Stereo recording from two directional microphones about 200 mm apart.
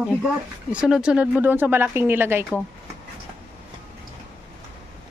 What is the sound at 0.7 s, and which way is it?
Speech, 5° right (ahead or behind).